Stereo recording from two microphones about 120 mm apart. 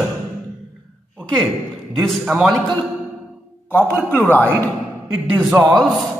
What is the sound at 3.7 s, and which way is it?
A man's voice, 15° left (ahead or behind).